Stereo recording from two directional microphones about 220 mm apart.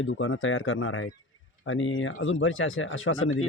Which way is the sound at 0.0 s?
65° left (ahead or behind).